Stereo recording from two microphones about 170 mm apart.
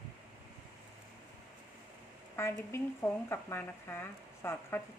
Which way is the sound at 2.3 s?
15° left (ahead or behind).